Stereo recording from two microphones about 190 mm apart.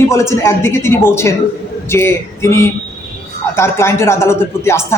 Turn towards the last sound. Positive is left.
turn(degrees=15)  # may be behind; listen again after turning